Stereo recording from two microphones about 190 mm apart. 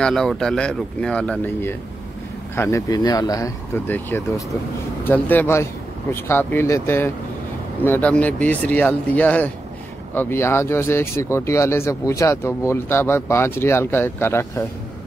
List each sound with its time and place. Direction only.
0.0 s speech: 5° left (ahead or behind)